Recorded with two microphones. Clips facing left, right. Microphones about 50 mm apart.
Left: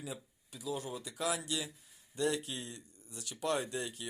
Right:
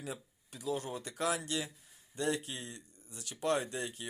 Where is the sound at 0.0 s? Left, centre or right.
Right.